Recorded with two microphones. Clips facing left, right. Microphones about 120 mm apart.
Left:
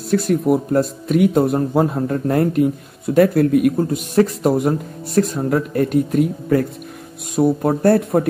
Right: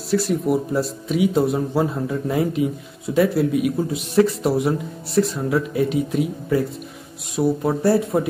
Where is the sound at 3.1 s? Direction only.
55° left (ahead or behind).